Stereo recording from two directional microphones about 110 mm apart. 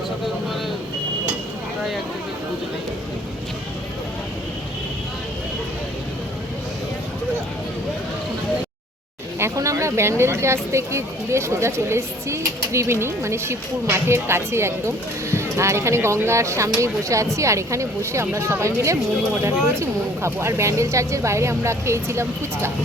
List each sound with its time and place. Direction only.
9.4 s speech: 25° right (ahead or behind)